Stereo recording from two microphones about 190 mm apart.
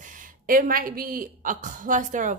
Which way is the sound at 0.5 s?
50° right (ahead or behind).